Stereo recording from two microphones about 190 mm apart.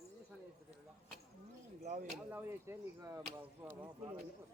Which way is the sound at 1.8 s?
40° right (ahead or behind).